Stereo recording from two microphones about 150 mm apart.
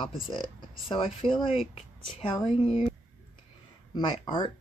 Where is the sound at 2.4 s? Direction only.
5° right (ahead or behind).